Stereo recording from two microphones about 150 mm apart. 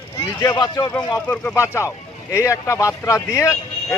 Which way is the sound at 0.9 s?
10° left (ahead or behind).